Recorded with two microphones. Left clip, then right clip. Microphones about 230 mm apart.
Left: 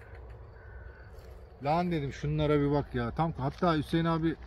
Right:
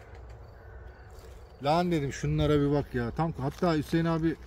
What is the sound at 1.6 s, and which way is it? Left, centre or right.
Speech, right.